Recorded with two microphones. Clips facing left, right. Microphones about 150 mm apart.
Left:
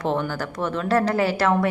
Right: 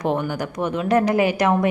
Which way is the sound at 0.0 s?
15° right (ahead or behind).